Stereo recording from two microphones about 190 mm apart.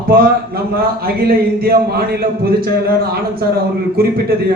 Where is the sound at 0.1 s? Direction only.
50° right (ahead or behind).